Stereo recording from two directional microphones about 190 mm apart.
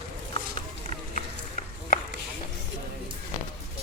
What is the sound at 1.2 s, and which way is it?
Run, 40° left (ahead or behind).